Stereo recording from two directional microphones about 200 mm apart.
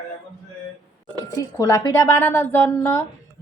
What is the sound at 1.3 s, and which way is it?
A woman's voice, 15° left (ahead or behind).